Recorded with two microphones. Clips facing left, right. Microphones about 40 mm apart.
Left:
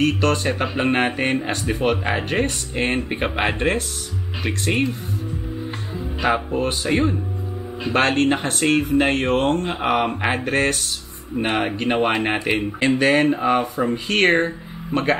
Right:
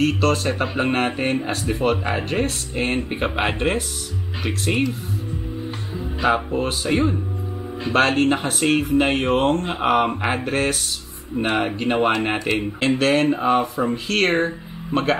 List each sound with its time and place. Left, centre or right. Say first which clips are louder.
0.0 s speech: even; centre
5.9 s speech: right 1 dB; centre
13.3 s speech: even; centre